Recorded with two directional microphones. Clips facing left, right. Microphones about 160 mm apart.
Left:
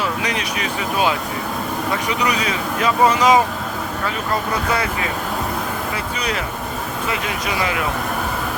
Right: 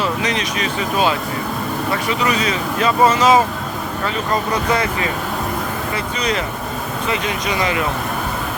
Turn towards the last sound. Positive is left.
turn(degrees=5)  # may be behind; listen again after turning